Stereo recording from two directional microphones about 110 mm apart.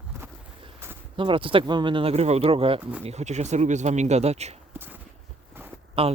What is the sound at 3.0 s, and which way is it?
Speech, 90° right.